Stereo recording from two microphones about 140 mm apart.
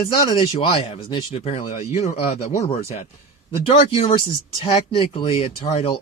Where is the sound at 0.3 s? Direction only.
40° left (ahead or behind).